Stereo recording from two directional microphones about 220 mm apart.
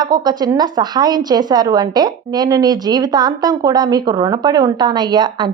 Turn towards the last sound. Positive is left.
turn(degrees=-20)  # may be behind; listen again after turning